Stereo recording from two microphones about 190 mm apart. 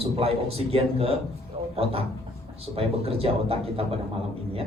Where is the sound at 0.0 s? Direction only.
30° right (ahead or behind).